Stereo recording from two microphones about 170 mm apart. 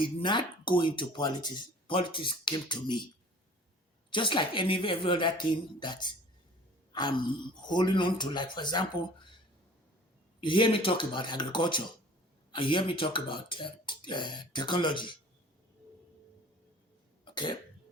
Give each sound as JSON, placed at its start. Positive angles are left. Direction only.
{"t": 0.0, "sound": "speech", "side_deg": 30}
{"t": 4.1, "sound": "speech", "side_deg": 30}
{"t": 10.4, "sound": "speech", "side_deg": 30}
{"t": 17.2, "sound": "cough", "side_deg": 30}